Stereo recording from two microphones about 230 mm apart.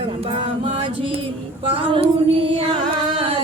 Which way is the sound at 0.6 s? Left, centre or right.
Right.